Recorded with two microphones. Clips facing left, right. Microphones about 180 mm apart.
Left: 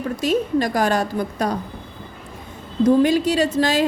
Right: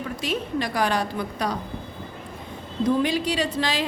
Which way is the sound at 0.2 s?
45° left (ahead or behind).